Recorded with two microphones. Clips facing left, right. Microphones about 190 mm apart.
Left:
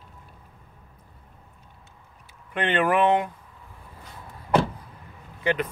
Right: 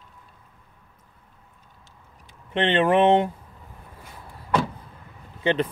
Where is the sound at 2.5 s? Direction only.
25° right (ahead or behind).